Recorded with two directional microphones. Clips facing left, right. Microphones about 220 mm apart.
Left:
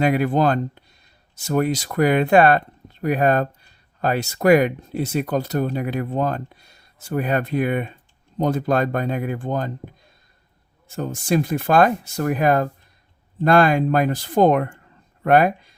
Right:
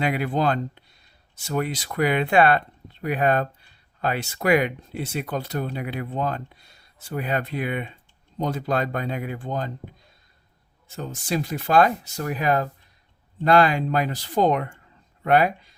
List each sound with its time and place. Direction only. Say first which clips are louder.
0.0 s speech: left 5 dB; 45° left (ahead or behind)
10.9 s speech: left 6 dB; 50° left (ahead or behind)